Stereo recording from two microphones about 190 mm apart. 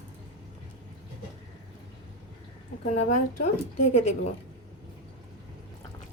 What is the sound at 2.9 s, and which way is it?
A woman's voice, 40° left (ahead or behind).